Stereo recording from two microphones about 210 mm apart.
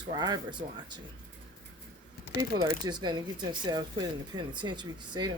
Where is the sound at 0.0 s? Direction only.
20° right (ahead or behind).